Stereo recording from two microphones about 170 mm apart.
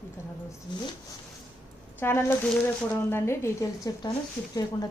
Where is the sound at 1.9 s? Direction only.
15° left (ahead or behind).